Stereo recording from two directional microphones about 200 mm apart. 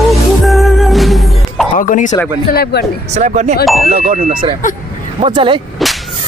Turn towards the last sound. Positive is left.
turn(degrees=-25)  # may be behind; listen again after turning